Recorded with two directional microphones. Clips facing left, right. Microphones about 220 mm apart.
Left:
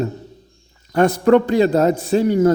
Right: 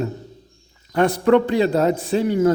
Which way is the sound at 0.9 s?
45° left (ahead or behind).